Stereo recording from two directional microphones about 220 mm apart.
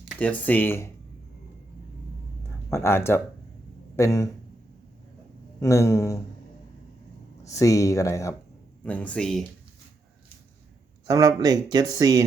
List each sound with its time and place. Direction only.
0.2 s speech: 5° left (ahead or behind)
2.6 s speech: 10° left (ahead or behind)
5.5 s speech: 15° left (ahead or behind)
7.4 s speech: 15° left (ahead or behind)
11.0 s speech: 15° right (ahead or behind)